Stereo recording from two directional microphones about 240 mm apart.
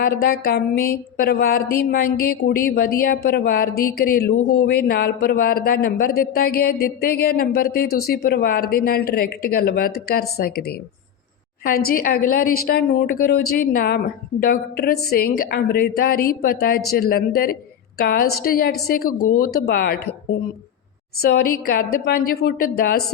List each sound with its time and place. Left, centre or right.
0.0 s speech: left
11.9 s speech: left
21.2 s speech: left